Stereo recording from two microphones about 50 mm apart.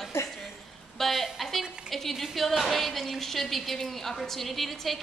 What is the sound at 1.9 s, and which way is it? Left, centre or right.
A woman's voice, centre.